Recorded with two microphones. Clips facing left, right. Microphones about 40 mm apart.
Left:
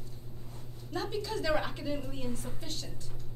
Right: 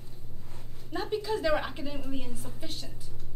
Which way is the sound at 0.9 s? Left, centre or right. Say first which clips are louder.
Right 4 dB; centre.